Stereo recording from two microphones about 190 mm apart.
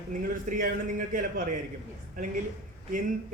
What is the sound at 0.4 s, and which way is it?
A man's voice, 45° right (ahead or behind).